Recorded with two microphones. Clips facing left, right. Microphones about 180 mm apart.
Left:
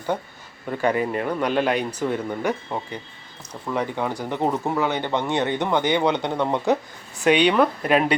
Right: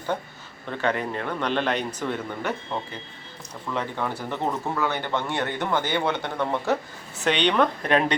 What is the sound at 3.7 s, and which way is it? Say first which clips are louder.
Speech: left 3 dB; 15° left (ahead or behind).